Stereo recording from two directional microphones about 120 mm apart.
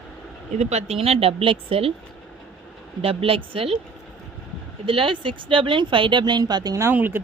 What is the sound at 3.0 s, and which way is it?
Speech, 50° right (ahead or behind).